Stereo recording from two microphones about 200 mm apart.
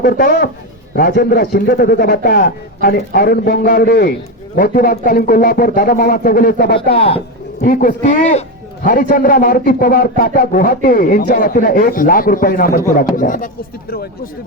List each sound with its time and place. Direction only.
0.0 s a man's voice: 45° left (ahead or behind)
6.9 s speech: 30° left (ahead or behind)
7.6 s a man's voice: 45° left (ahead or behind)